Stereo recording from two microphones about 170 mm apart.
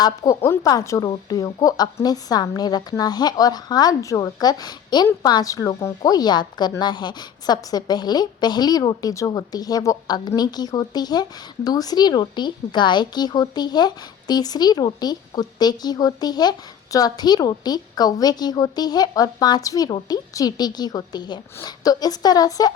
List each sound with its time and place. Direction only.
0.0 s speech: 20° left (ahead or behind)